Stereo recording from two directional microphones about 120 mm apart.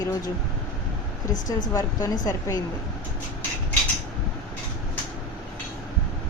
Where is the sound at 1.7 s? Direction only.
30° left (ahead or behind).